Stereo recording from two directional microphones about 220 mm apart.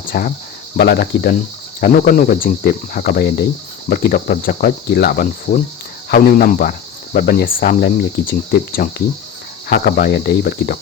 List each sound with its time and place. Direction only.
0.1 s speech: 40° left (ahead or behind)